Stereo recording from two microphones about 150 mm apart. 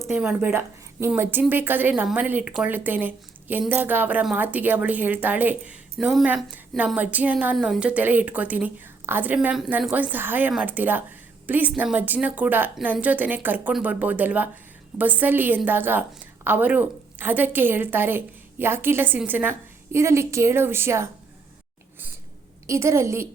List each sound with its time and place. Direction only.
0.0 s a woman's voice: 10° right (ahead or behind)
22.6 s a woman's voice: 20° right (ahead or behind)